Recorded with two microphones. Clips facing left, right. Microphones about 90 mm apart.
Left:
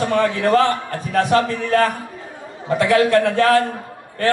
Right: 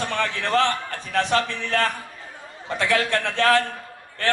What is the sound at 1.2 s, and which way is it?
Speech, 15° left (ahead or behind).